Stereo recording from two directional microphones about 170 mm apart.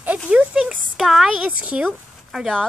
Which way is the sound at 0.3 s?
5° right (ahead or behind).